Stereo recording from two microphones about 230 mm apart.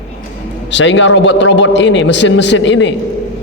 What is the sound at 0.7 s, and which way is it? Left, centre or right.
A man's voice, left.